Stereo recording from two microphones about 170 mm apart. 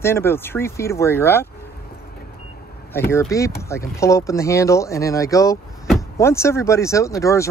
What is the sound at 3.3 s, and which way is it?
Speech, 15° left (ahead or behind).